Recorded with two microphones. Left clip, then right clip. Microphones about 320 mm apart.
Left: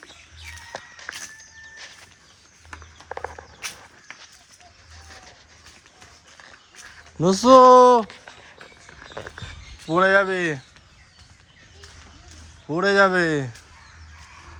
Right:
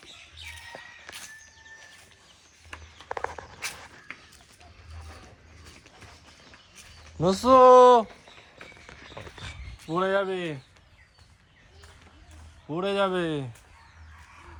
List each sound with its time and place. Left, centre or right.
7.2 s speech: centre
9.8 s speech: centre
12.6 s speech: centre